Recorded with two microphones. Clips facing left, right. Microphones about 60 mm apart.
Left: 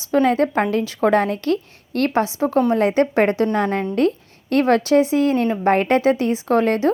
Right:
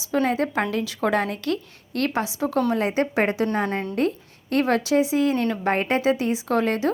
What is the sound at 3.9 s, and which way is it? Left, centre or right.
A woman's voice, left.